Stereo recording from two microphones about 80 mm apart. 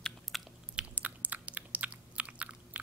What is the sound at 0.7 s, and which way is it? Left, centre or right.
Biting, centre.